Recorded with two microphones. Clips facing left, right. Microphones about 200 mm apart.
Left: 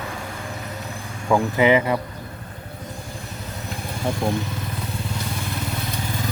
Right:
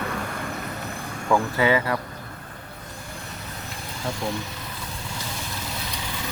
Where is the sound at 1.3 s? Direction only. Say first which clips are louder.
Left 4 dB; 20° left (ahead or behind).